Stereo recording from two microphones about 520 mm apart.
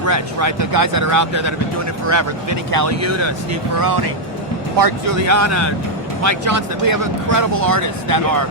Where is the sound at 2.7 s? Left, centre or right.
Right.